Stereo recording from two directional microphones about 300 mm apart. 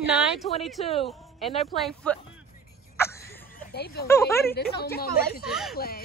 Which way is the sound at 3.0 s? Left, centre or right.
Centre.